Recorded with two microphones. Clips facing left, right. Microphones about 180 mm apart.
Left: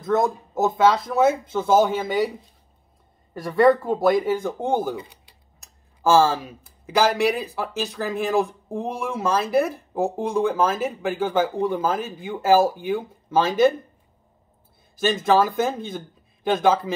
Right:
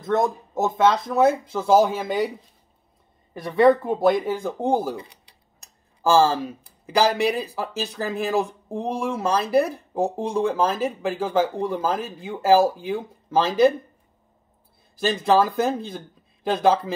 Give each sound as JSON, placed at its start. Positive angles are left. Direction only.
{"t": 0.7, "sound": "speech", "side_deg": 0}
{"t": 3.3, "sound": "speech", "side_deg": 0}
{"t": 6.0, "sound": "speech", "side_deg": 0}
{"t": 15.0, "sound": "speech", "side_deg": 0}